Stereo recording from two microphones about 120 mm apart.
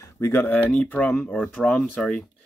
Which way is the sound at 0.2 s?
20° left (ahead or behind).